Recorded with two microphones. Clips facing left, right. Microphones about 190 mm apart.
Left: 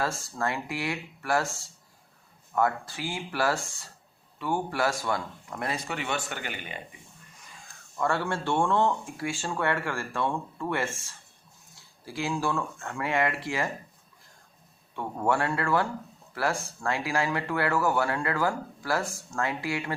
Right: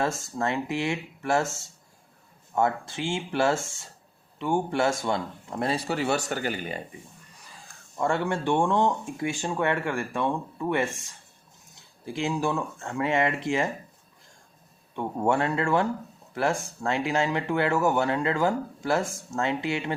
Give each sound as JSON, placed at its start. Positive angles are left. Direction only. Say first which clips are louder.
{"t": 0.0, "sound": "a man's voice", "louder": "right 3 dB", "side_deg": -20}
{"t": 7.9, "sound": "speech", "louder": "right 2 dB", "side_deg": -20}
{"t": 14.9, "sound": "speech", "louder": "right 2 dB", "side_deg": -20}